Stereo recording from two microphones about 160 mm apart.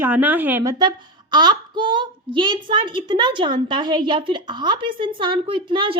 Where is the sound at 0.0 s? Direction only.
10° right (ahead or behind).